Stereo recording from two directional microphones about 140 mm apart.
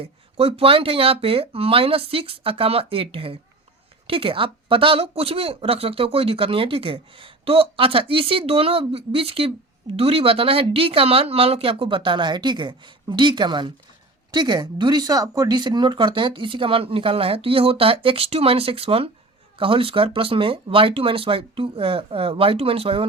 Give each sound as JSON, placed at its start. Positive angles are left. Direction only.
{"t": 0.0, "sound": "speech", "side_deg": -45}